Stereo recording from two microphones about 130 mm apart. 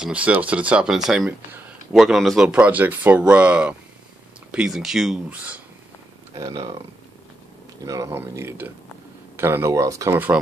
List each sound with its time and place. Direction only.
0.0 s speech: 10° right (ahead or behind)
6.4 s speech: 45° right (ahead or behind)
7.8 s speech: 25° right (ahead or behind)